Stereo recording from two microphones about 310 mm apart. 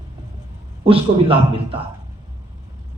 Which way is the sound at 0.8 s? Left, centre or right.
Centre.